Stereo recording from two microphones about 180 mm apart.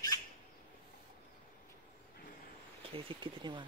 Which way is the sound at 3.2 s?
25° right (ahead or behind).